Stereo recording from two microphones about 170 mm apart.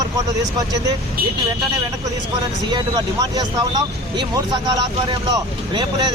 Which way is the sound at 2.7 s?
25° right (ahead or behind).